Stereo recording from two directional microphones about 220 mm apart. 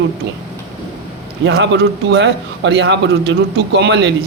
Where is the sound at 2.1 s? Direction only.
55° right (ahead or behind).